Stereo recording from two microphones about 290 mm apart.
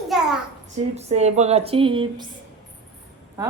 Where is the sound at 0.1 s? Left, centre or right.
Centre.